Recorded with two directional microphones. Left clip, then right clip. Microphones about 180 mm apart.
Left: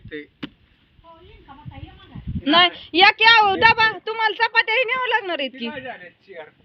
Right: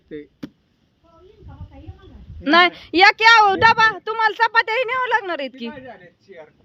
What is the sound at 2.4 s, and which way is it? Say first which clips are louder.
A woman's voice: right 2 dB; 30° right (ahead or behind).